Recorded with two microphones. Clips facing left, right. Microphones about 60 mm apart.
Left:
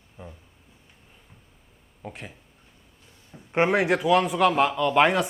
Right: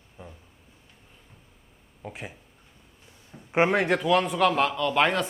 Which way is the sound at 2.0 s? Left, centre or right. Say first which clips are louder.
Right 1 dB; centre.